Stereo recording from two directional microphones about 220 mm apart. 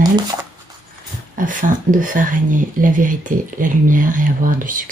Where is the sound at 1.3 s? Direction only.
35° right (ahead or behind).